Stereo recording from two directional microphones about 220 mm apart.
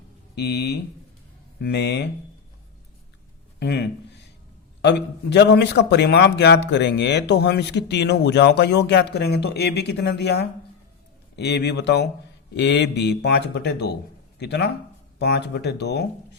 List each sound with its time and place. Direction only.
0.3 s a man's voice: 50° left (ahead or behind)
3.6 s a man's voice: 50° left (ahead or behind)